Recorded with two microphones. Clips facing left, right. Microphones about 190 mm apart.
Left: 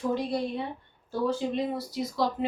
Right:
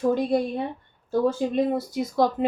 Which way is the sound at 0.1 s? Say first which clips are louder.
Right 6 dB; 50° right (ahead or behind).